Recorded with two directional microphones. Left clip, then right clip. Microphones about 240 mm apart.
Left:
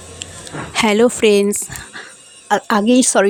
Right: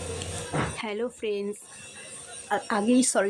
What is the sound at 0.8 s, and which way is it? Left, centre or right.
Speech, left.